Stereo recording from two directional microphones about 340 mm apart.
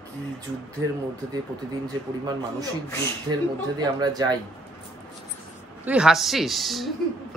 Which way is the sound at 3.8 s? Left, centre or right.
Centre.